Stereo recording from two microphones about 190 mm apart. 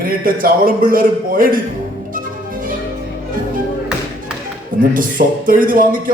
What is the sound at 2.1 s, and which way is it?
Music, 45° right (ahead or behind).